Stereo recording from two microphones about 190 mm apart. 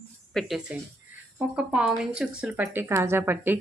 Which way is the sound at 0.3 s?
Centre (ahead or behind).